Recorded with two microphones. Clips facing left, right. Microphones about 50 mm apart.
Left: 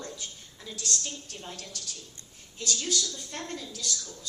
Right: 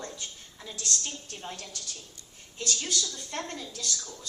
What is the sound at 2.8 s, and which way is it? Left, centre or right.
A woman's voice, right.